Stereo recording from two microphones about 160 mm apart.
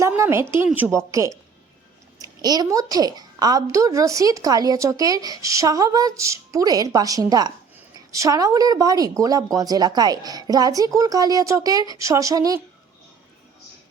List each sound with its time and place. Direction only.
0.2 s a woman's voice: 15° right (ahead or behind)